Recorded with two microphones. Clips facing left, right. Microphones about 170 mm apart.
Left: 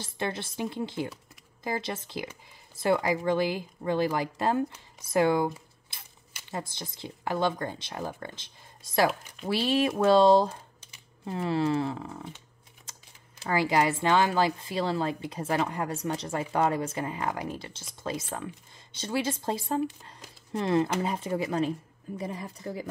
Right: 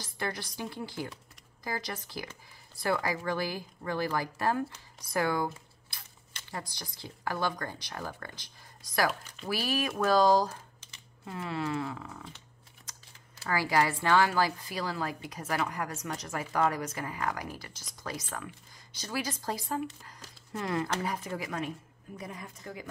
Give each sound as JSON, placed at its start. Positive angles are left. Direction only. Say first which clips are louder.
{"t": 0.0, "sound": "speech", "louder": "left 4 dB", "side_deg": 25}
{"t": 5.1, "sound": "a sound", "louder": "left 6 dB", "side_deg": 20}
{"t": 6.5, "sound": "speech", "louder": "left 5 dB", "side_deg": 25}
{"t": 13.4, "sound": "speech", "louder": "left 3 dB", "side_deg": 20}